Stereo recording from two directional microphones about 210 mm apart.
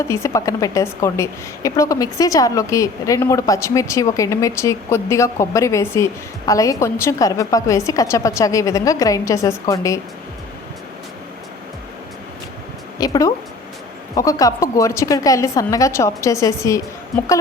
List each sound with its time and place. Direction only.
0.1 s a woman's voice: 15° left (ahead or behind)
13.0 s a woman's voice: 15° left (ahead or behind)